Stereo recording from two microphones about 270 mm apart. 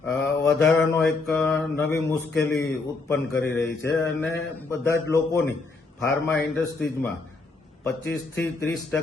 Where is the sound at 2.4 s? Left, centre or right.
Left.